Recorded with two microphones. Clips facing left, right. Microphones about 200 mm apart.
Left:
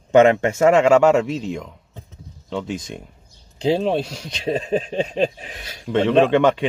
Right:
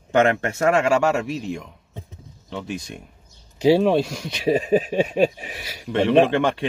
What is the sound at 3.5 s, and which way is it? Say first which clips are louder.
Speech: right 3 dB; 10° right (ahead or behind).